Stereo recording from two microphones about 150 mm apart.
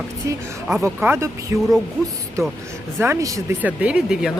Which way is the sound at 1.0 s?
15° right (ahead or behind).